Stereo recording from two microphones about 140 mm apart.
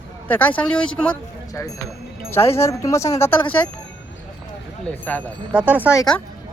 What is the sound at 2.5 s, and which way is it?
Speech, 20° left (ahead or behind).